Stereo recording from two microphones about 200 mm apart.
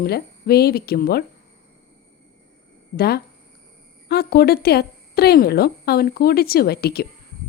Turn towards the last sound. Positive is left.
turn(degrees=50)  # may be behind; listen again after turning